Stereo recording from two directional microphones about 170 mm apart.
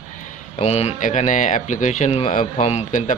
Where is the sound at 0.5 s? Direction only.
40° left (ahead or behind).